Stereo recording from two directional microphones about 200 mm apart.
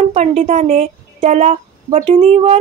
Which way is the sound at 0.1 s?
35° right (ahead or behind).